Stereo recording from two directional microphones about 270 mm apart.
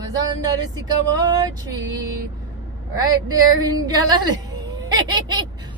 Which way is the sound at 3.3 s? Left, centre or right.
Centre.